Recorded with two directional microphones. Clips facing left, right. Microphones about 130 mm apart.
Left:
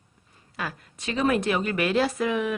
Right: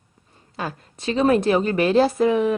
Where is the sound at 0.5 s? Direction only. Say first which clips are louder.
Right 4 dB; 30° right (ahead or behind).